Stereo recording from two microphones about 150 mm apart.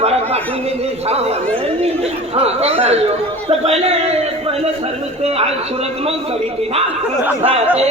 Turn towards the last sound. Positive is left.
turn(degrees=-35)  # may be behind; listen again after turning